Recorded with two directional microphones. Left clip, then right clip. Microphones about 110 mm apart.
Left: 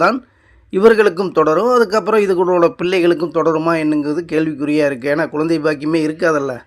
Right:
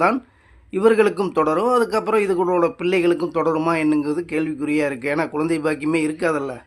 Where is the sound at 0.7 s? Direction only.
40° left (ahead or behind).